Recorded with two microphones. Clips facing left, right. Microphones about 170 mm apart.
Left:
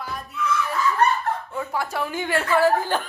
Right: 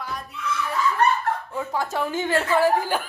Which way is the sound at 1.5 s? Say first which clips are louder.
Right 1 dB; 15° right (ahead or behind).